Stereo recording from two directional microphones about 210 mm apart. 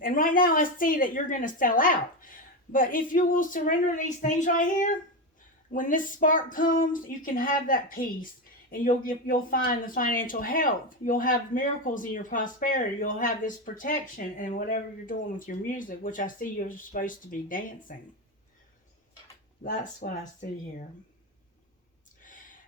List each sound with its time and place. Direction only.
0.0 s speech: 40° left (ahead or behind)
20.0 s speech: 45° left (ahead or behind)
22.2 s gasp: 40° left (ahead or behind)